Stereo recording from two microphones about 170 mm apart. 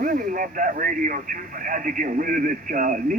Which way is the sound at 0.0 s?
55° right (ahead or behind).